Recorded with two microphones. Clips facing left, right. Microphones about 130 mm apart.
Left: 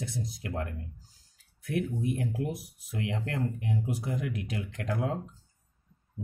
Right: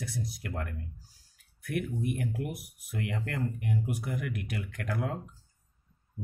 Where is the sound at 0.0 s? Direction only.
25° left (ahead or behind).